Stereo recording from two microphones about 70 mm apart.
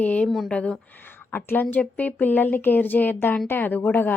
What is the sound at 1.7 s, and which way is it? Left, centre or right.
A woman's voice, left.